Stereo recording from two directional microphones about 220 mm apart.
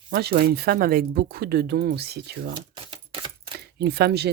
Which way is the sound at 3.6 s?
50° right (ahead or behind).